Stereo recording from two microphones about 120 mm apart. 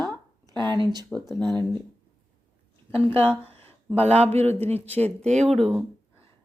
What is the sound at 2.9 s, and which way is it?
Speech, 50° right (ahead or behind).